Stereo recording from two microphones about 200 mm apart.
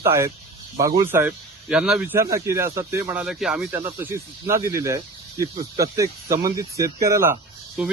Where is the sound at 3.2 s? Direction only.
Centre (ahead or behind).